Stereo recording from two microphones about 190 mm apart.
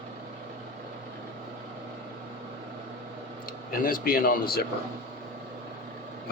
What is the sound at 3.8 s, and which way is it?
Speech, 50° left (ahead or behind).